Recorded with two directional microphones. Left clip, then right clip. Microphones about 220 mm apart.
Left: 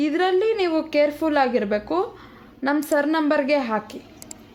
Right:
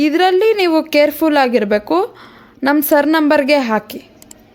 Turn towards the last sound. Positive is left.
turn(degrees=-35)  # may be behind; listen again after turning